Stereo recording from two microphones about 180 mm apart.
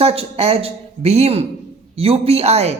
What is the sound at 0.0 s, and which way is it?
Speech, 35° right (ahead or behind).